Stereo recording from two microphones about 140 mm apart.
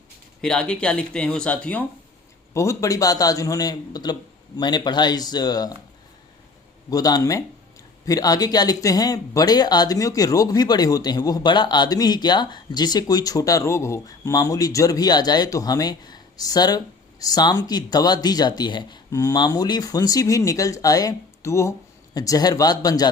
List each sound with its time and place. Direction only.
0.4 s speech: 5° left (ahead or behind)
2.5 s speech: 20° left (ahead or behind)
6.9 s speech: 25° left (ahead or behind)